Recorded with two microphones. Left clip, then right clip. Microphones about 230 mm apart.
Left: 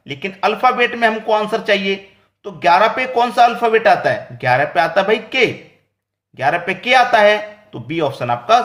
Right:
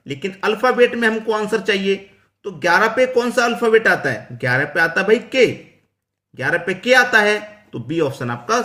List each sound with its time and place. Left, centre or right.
0.1 s speech: centre